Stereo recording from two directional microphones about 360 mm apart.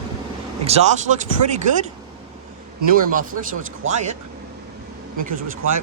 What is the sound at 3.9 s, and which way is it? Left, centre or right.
Speech, centre.